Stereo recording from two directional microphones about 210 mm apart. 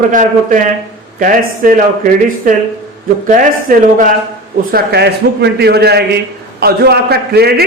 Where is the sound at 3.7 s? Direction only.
40° right (ahead or behind).